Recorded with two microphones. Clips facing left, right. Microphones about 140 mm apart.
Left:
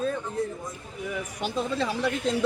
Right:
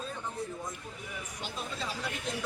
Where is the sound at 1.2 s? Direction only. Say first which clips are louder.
Left 11 dB; 80° left.